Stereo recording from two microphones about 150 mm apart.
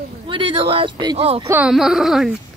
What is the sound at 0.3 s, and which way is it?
Speech, 35° right (ahead or behind).